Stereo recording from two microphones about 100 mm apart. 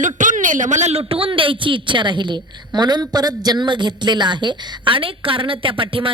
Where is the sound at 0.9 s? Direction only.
80° right.